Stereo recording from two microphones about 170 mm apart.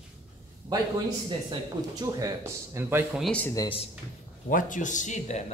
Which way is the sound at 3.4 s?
20° left (ahead or behind).